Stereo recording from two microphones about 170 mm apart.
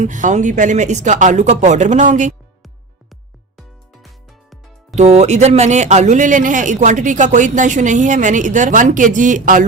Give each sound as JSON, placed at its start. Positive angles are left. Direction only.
{"t": 0.0, "sound": "speech", "side_deg": -45}
{"t": 3.9, "sound": "music", "side_deg": 0}
{"t": 4.9, "sound": "speech", "side_deg": -40}